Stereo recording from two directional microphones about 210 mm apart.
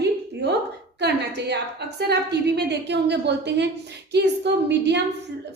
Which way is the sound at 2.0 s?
50° right (ahead or behind).